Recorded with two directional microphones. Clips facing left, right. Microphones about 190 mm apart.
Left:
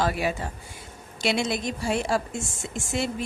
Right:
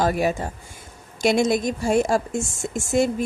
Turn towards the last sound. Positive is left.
turn(degrees=-45)  # may be behind; listen again after turning